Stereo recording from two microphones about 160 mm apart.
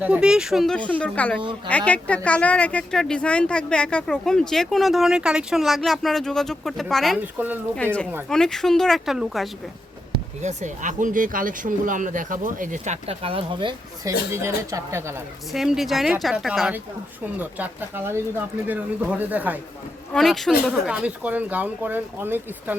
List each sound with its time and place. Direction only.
0.0 s speech: 5° right (ahead or behind)
7.3 s speech: 10° right (ahead or behind)
8.3 s speech: 5° left (ahead or behind)
10.4 s speech: 50° right (ahead or behind); by 14.1 s 30° right (ahead or behind)
14.3 s speech: 15° right (ahead or behind)
15.5 s speech: centre (ahead or behind)
20.1 s speech: centre (ahead or behind)